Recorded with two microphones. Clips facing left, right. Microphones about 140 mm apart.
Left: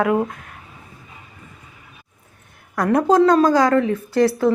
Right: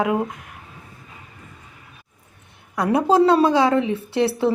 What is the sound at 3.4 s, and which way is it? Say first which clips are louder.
Speech: left 2 dB; 25° right (ahead or behind).